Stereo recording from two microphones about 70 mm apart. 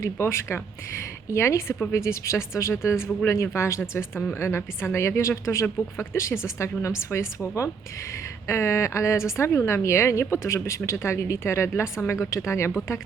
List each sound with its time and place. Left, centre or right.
0.0 s a woman's voice: left